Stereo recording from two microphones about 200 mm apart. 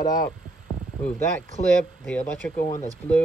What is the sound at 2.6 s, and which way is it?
Speech, 45° left (ahead or behind).